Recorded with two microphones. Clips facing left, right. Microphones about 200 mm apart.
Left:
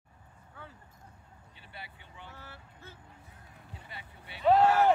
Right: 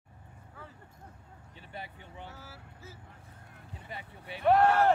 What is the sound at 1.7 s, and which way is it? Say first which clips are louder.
Vehicle: right 5 dB; 40° right (ahead or behind).